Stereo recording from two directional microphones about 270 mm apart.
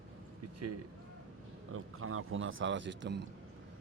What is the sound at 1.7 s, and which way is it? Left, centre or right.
Speech, right.